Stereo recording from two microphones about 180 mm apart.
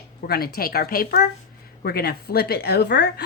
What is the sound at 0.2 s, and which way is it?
Speech, 55° left (ahead or behind).